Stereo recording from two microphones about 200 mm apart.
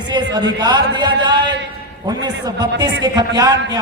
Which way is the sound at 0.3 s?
20° right (ahead or behind).